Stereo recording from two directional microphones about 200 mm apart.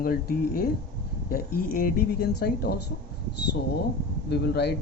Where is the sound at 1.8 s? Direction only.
50° left (ahead or behind).